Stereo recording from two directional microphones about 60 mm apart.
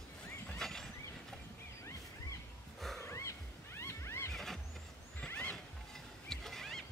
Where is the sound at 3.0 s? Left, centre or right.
Left.